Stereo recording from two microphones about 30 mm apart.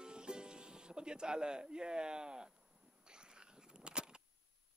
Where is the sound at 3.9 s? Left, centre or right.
Right.